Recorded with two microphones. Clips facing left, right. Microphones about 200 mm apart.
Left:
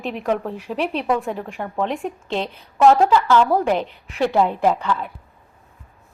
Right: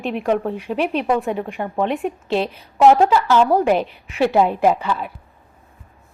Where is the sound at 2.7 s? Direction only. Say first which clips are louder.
Right 1 dB; 15° right (ahead or behind).